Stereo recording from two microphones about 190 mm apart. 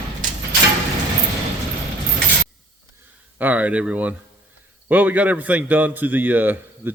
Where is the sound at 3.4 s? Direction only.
10° right (ahead or behind).